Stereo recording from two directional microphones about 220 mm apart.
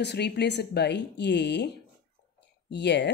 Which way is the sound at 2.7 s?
50° left (ahead or behind).